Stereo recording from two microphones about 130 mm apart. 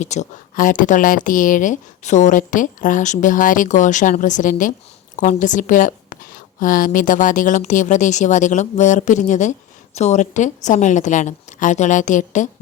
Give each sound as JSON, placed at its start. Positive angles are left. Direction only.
{"t": 0.0, "sound": "a woman's voice", "side_deg": 65}